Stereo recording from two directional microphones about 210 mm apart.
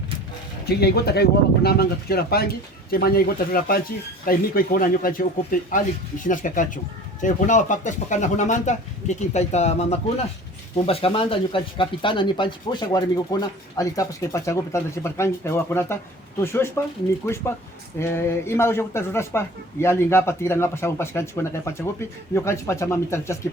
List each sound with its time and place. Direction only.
0.8 s speech: 50° left (ahead or behind); by 23.4 s 15° left (ahead or behind)